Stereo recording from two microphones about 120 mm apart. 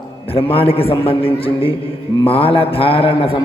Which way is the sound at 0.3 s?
50° left (ahead or behind).